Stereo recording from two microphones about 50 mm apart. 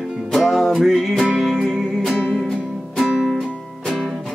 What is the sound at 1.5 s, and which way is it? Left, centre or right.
Music, centre.